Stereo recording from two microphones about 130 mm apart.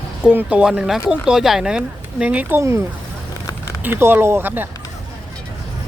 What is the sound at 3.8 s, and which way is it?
Speech, 15° right (ahead or behind).